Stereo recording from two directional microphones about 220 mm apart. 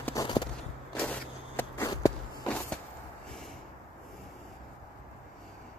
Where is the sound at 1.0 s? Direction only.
10° left (ahead or behind).